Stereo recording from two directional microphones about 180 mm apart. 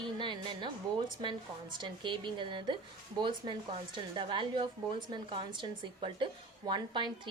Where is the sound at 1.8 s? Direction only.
25° right (ahead or behind).